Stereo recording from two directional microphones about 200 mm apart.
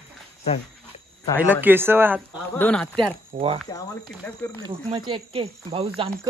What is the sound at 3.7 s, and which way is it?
Speech, 20° left (ahead or behind).